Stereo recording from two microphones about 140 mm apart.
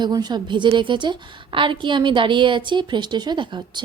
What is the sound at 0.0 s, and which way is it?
A woman's voice, 30° right (ahead or behind).